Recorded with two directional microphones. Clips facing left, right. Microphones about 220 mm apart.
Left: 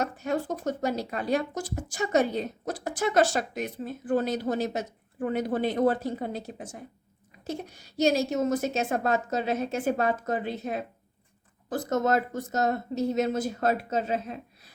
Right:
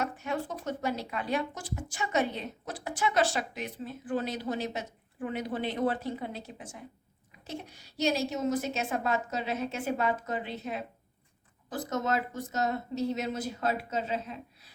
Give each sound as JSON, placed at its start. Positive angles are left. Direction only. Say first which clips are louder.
{"t": 0.0, "sound": "speech", "louder": "left 4 dB", "side_deg": 40}